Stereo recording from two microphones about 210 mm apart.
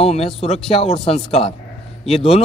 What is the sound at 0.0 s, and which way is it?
Speech, 30° left (ahead or behind).